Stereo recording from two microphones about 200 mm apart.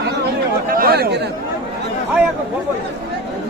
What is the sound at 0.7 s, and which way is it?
Speech, 50° right (ahead or behind).